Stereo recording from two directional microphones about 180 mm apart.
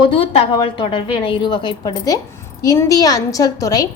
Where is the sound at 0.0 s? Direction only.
30° left (ahead or behind).